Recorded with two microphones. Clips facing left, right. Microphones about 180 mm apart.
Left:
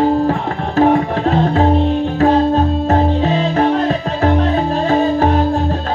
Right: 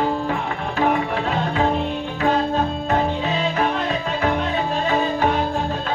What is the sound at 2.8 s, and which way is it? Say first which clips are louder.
Music: left 7 dB; 40° left (ahead or behind).